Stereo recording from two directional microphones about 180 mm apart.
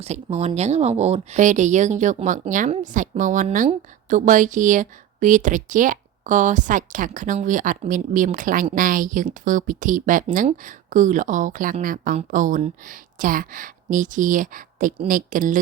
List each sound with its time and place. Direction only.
0.0 s speech: 35° right (ahead or behind)